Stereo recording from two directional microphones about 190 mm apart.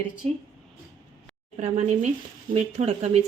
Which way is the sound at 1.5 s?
35° right (ahead or behind).